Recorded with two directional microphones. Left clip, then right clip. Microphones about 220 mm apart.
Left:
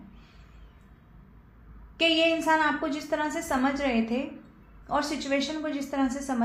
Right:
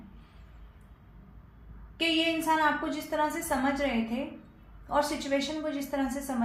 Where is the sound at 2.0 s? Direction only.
45° left (ahead or behind).